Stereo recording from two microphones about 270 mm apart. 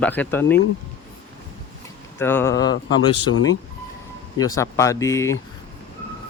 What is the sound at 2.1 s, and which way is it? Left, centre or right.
Speech, centre.